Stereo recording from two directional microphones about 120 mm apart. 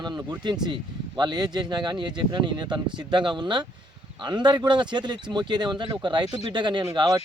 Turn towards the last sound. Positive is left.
turn(degrees=-35)  # may be behind; listen again after turning